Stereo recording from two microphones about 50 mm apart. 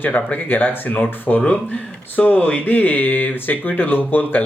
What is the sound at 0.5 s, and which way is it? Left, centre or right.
Speech, left.